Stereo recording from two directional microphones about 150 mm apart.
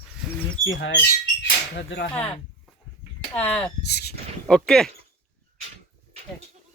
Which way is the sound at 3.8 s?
90° left.